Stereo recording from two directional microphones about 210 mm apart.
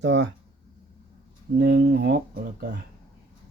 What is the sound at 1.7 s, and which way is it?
Speech, 50° right (ahead or behind).